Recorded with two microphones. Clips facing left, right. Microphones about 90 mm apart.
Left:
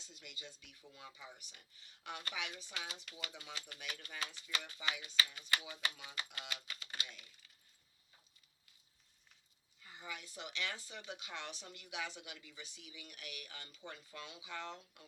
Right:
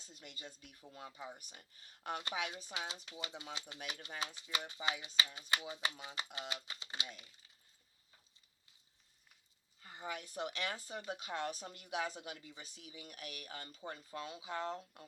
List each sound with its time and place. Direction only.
0.0 s speech: 40° right (ahead or behind)
2.7 s speech: 25° right (ahead or behind)
9.8 s speech: 50° right (ahead or behind)